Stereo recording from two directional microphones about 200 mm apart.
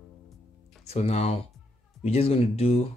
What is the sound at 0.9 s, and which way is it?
Speech, 30° left (ahead or behind).